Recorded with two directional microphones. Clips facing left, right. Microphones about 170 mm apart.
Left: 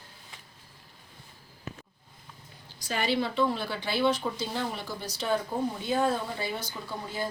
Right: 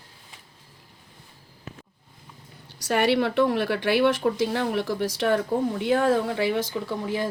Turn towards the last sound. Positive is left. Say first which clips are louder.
# right 7 dB
turn(degrees=-90)